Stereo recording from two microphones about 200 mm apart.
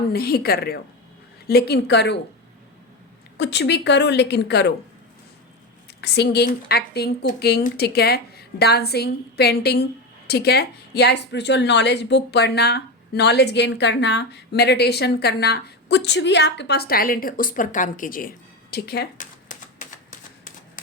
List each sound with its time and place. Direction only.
0.1 s a woman's voice: 50° left (ahead or behind)
3.3 s a woman's voice: 60° left (ahead or behind)
6.0 s speech: 55° left (ahead or behind); by 20.5 s 40° left (ahead or behind)